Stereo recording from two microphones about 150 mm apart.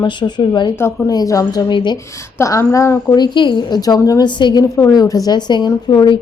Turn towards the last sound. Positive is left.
turn(degrees=25)  # may be behind; listen again after turning